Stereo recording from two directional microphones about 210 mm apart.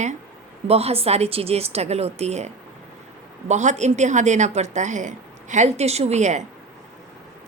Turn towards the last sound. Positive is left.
turn(degrees=-35)  # may be behind; listen again after turning